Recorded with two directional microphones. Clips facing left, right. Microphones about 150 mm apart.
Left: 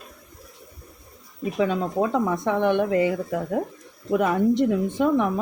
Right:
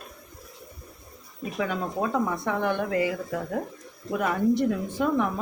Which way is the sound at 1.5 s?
20° left (ahead or behind).